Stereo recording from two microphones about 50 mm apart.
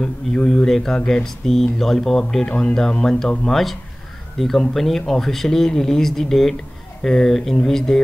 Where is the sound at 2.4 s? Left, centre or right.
Centre.